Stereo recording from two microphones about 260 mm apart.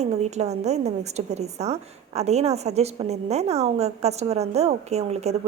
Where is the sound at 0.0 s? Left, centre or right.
Right.